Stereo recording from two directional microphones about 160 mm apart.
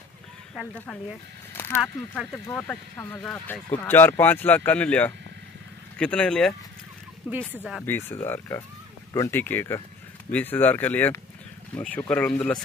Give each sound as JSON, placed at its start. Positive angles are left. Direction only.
{"t": 1.5, "sound": "a sound", "side_deg": 15}
{"t": 1.8, "sound": "speech", "side_deg": 0}
{"t": 2.5, "sound": "speech", "side_deg": 10}
{"t": 7.3, "sound": "speech", "side_deg": -5}
{"t": 7.8, "sound": "speech", "side_deg": 15}